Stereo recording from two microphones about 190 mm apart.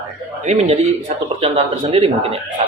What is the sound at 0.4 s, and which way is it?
Speech, 35° right (ahead or behind).